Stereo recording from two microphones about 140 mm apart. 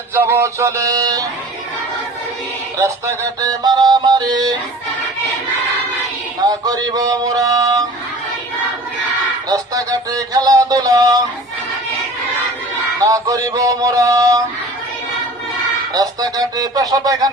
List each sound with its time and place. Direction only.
0.1 s music: 20° right (ahead or behind)
2.7 s music: 20° right (ahead or behind)
6.4 s a sound: 30° right (ahead or behind)
9.5 s music: 25° right (ahead or behind)
13.0 s music: 25° right (ahead or behind)
15.9 s music: 25° right (ahead or behind)